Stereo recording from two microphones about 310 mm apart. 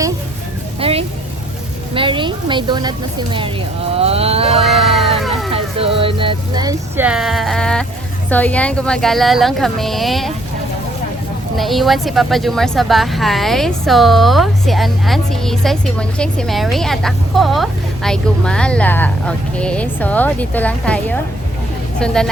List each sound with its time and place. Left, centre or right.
0.8 s vehicle: centre
1.9 s speech: centre
3.9 s a sound: centre
4.6 s a sound: centre
5.5 s speech: centre
11.5 s speech: centre